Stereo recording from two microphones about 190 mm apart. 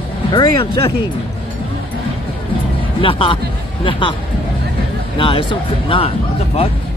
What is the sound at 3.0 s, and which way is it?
Speech, 25° left (ahead or behind).